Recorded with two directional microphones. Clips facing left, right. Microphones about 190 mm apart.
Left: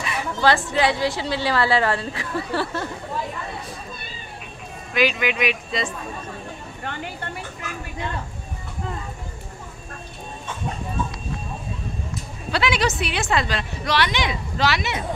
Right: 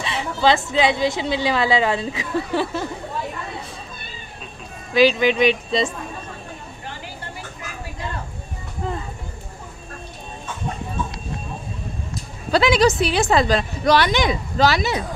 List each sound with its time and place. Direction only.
0.0 s a woman's voice: 25° right (ahead or behind)
4.9 s a woman's voice: 30° right (ahead or behind)
6.8 s vehicle: 60° left (ahead or behind)
12.4 s a woman's voice: 40° right (ahead or behind)